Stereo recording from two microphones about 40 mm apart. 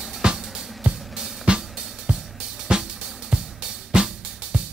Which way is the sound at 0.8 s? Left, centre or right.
Right.